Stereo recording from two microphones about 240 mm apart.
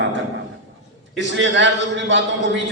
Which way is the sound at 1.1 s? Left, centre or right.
Right.